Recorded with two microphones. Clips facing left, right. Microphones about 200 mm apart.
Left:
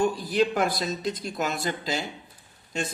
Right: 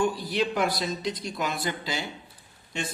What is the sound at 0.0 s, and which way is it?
A man's voice, 45° left (ahead or behind).